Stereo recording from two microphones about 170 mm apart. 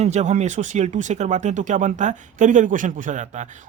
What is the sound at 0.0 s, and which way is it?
A man's voice, 40° right (ahead or behind).